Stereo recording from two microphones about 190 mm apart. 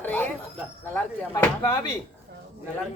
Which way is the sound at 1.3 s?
15° left (ahead or behind).